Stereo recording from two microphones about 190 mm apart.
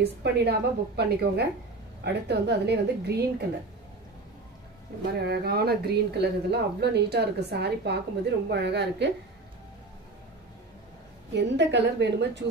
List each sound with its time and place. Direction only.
0.0 s a woman's voice: 60° right (ahead or behind)
5.2 s a woman's voice: 55° right (ahead or behind)
11.3 s a woman's voice: 65° right (ahead or behind)